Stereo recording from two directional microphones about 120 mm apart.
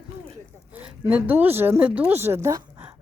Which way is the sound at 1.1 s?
15° right (ahead or behind).